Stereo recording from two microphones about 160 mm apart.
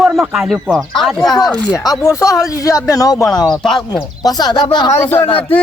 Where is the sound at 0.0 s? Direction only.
Centre (ahead or behind).